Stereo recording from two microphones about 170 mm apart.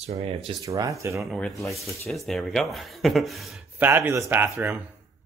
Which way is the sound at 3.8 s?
15° right (ahead or behind).